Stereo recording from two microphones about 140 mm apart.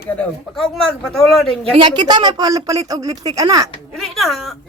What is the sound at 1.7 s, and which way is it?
A woman's voice, 35° right (ahead or behind).